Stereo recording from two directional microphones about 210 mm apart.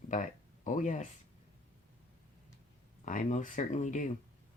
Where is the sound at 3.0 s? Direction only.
40° left (ahead or behind).